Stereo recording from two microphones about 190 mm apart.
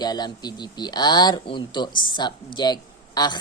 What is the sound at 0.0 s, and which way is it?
A woman's voice, 20° left (ahead or behind).